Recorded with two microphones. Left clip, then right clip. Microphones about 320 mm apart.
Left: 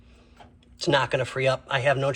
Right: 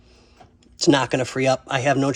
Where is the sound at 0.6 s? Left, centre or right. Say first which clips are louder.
Right 4 dB; right.